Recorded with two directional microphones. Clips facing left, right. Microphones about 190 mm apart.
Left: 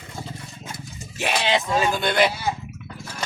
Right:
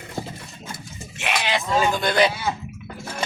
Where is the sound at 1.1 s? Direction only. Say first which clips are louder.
Left 2 dB; 35° left (ahead or behind).